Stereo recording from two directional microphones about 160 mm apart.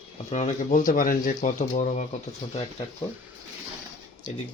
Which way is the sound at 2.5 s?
35° left (ahead or behind).